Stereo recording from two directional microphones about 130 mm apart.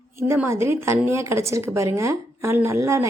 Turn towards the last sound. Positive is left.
turn(degrees=-25)  # may be behind; listen again after turning